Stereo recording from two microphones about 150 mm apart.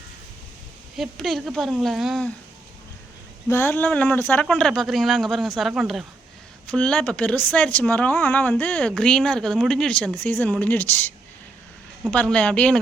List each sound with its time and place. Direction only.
0.9 s speech: centre (ahead or behind)
3.5 s speech: 15° left (ahead or behind); by 6.1 s 5° right (ahead or behind)
6.7 s speech: 5° left (ahead or behind)
12.1 s speech: 10° left (ahead or behind)